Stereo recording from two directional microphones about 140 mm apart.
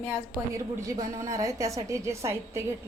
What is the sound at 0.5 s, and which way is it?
A woman's voice, 25° right (ahead or behind).